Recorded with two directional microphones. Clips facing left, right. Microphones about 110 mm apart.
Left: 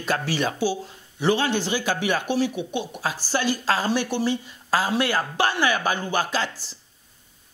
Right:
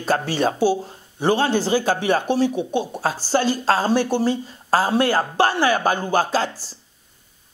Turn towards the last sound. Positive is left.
turn(degrees=-40)  # may be behind; listen again after turning